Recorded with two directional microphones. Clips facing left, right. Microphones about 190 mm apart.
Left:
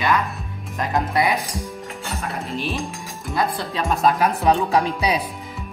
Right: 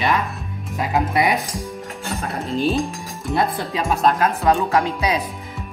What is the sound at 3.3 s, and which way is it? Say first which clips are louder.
Speech: right 2 dB; 20° right (ahead or behind).